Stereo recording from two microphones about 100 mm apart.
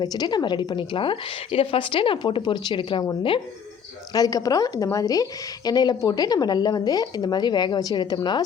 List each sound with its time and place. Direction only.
0.0 s a woman's voice: 45° left (ahead or behind)
4.1 s a woman's voice: 40° left (ahead or behind)